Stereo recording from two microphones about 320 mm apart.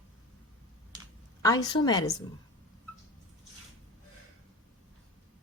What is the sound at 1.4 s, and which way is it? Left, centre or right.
Speech, centre.